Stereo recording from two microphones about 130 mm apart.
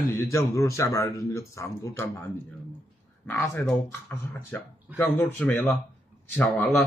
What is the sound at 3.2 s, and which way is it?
Speech, 20° left (ahead or behind).